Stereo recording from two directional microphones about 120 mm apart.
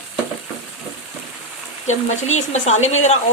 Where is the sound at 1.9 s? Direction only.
75° left (ahead or behind).